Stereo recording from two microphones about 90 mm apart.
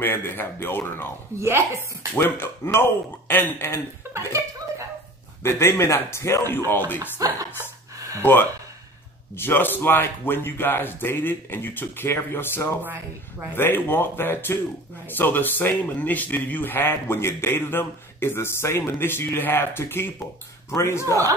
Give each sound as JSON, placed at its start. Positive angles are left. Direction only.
{"t": 0.0, "sound": "speech", "side_deg": 25}
{"t": 1.4, "sound": "speech", "side_deg": -30}
{"t": 2.1, "sound": "speech", "side_deg": 25}
{"t": 5.4, "sound": "speech", "side_deg": 25}
{"t": 7.2, "sound": "speech", "side_deg": -40}
{"t": 8.2, "sound": "a man's voice", "side_deg": 25}